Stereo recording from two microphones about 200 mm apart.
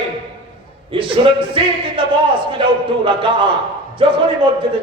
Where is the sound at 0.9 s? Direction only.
25° right (ahead or behind).